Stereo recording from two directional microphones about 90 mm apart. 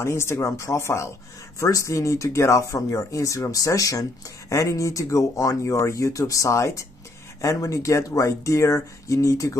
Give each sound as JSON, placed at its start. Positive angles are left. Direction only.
{"t": 0.0, "sound": "speech", "side_deg": 30}